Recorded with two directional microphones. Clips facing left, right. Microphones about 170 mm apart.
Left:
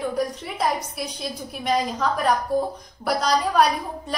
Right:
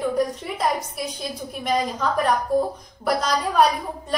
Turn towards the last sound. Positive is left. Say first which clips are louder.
# even
turn(degrees=0)  # may be behind; listen again after turning